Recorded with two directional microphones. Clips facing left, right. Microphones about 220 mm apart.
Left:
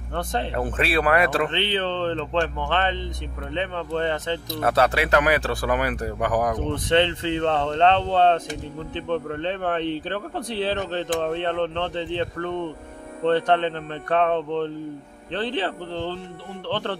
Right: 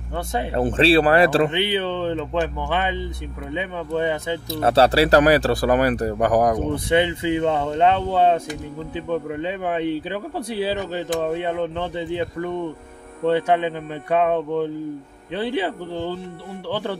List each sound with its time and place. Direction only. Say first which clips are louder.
0.1 s speech: right 1 dB; 10° right (ahead or behind)
0.6 s speech: right 9 dB; 30° right (ahead or behind)
1.5 s speech: right 2 dB; 10° right (ahead or behind)
4.5 s speech: right 5 dB; 30° right (ahead or behind)
6.7 s speech: right 1 dB; 10° right (ahead or behind)